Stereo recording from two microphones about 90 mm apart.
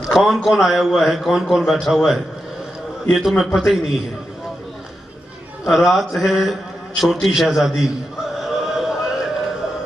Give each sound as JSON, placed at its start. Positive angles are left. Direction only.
{"t": 0.1, "sound": "a man's voice", "side_deg": 0}
{"t": 5.7, "sound": "a man's voice", "side_deg": 0}
{"t": 8.5, "sound": "music", "side_deg": -5}